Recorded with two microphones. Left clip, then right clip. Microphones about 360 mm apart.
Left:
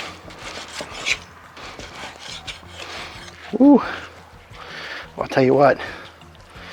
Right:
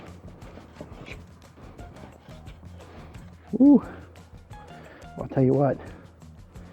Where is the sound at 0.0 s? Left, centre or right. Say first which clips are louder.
Left 14 dB; centre.